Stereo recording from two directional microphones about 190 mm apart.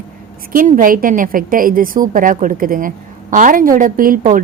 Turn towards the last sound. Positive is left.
turn(degrees=-45)  # may be behind; listen again after turning